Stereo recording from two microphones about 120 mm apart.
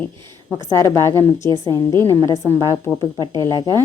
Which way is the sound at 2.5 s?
25° right (ahead or behind).